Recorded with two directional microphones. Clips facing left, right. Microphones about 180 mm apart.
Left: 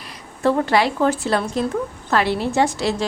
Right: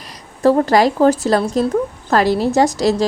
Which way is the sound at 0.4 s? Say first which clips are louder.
Right 5 dB; 40° right (ahead or behind).